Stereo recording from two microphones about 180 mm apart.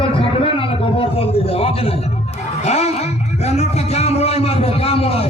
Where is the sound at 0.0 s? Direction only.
30° left (ahead or behind).